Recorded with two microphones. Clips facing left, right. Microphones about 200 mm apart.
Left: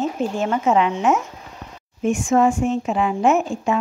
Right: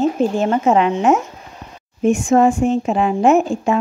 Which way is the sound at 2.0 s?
30° right (ahead or behind).